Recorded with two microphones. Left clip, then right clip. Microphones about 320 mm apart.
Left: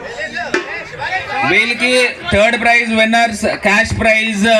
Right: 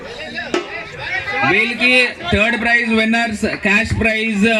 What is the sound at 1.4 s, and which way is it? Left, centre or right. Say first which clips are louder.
Speech: left 1 dB; left.